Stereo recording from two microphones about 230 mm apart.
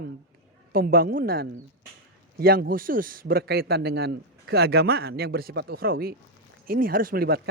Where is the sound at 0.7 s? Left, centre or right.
Right.